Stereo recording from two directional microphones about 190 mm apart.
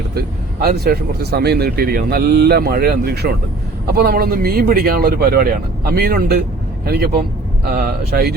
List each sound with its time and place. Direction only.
0.1 s speech: 55° right (ahead or behind)